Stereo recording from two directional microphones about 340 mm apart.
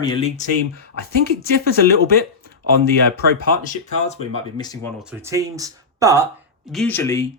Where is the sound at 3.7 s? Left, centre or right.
Centre.